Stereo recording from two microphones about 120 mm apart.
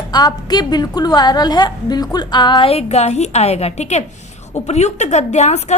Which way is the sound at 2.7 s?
60° left (ahead or behind).